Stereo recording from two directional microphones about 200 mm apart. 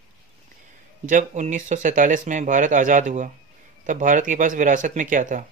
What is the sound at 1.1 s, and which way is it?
Speech, 40° right (ahead or behind).